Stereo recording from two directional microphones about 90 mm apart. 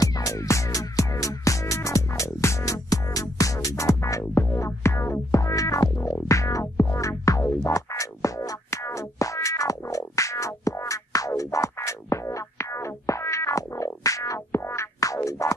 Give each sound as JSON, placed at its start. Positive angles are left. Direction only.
{"t": 0.0, "sound": "music", "side_deg": 40}
{"t": 15.0, "sound": "music", "side_deg": 40}